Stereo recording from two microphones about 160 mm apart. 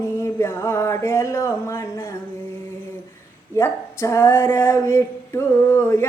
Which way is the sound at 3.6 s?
15° left (ahead or behind).